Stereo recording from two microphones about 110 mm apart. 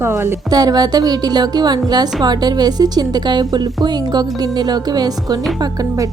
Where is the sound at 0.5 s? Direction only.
35° right (ahead or behind).